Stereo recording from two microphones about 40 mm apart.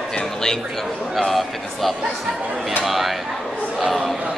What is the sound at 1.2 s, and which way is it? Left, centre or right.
A woman's voice, centre.